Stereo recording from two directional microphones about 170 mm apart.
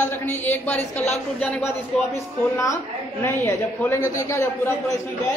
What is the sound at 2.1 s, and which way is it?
A woman's voice, 20° left (ahead or behind).